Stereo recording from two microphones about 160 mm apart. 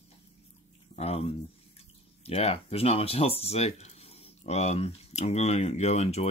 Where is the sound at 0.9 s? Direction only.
40° left (ahead or behind).